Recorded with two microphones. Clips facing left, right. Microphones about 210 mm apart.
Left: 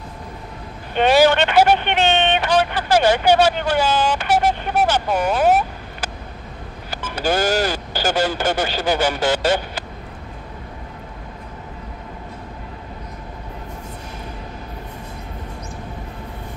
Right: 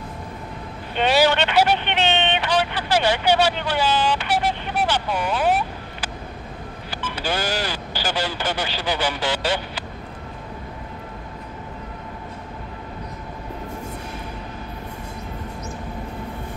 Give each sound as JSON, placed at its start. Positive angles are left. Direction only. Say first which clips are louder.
{"t": 0.9, "sound": "vehicle", "louder": "left 4 dB", "side_deg": 50}
{"t": 6.9, "sound": "speech", "louder": "left 5 dB", "side_deg": 45}